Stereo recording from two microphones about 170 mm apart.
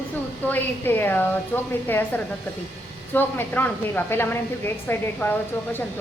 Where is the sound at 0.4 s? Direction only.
10° left (ahead or behind).